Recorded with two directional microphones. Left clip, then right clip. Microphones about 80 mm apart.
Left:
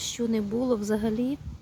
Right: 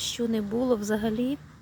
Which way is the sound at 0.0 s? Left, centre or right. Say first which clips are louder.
Even; left.